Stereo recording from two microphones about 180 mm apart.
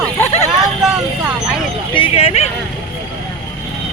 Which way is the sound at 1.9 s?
30° left (ahead or behind).